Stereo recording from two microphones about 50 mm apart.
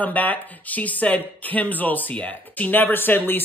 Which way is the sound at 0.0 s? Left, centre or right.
Left.